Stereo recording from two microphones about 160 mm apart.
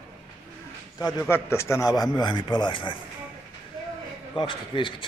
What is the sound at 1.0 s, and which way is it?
Speech, 20° left (ahead or behind).